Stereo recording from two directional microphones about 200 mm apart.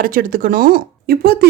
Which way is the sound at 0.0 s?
45° right (ahead or behind).